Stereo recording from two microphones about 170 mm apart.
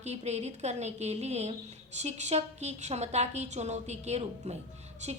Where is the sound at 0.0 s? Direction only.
40° right (ahead or behind).